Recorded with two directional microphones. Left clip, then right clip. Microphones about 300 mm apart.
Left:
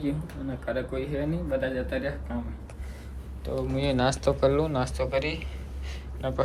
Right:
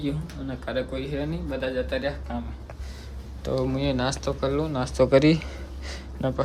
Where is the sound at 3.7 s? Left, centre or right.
Centre.